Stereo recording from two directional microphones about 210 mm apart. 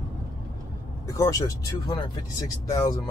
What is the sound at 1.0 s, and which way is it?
Speech, 15° left (ahead or behind).